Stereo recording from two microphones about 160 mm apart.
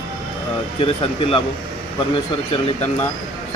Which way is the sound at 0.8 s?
35° left (ahead or behind).